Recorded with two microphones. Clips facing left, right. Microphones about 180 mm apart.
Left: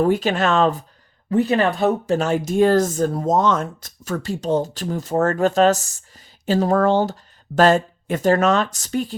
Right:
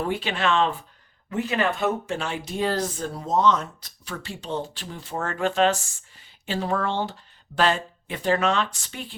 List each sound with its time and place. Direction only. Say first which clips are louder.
0.0 s speech: left 8 dB; 45° left (ahead or behind)